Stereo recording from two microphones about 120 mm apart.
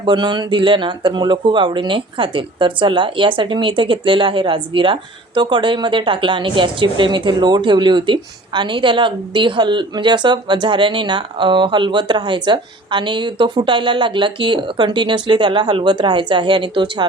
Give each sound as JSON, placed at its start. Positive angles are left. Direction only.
{"t": 0.0, "sound": "speech", "side_deg": -40}